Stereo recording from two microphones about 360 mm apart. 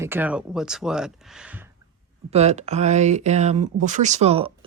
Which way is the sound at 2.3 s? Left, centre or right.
Centre.